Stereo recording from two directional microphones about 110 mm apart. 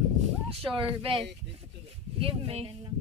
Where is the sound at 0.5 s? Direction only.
55° right (ahead or behind).